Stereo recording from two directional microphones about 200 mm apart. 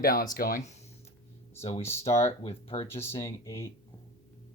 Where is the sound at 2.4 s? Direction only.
30° left (ahead or behind).